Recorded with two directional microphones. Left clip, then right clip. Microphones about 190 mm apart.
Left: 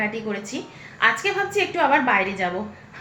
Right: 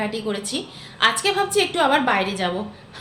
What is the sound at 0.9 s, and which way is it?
A woman's voice, 15° right (ahead or behind).